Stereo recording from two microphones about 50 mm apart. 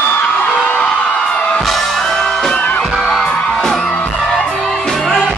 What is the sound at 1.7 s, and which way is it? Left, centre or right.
Music, centre.